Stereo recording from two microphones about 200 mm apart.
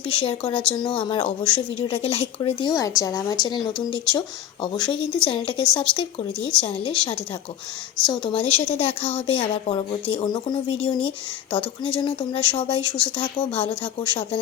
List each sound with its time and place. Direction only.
0.1 s speech: 25° left (ahead or behind)
8.9 s speech: 10° left (ahead or behind)
9.2 s speech: 25° left (ahead or behind)